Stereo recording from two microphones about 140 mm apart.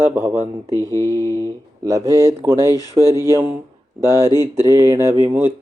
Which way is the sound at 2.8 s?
25° left (ahead or behind).